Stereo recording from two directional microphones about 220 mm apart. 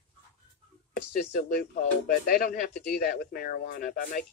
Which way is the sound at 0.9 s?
45° left (ahead or behind).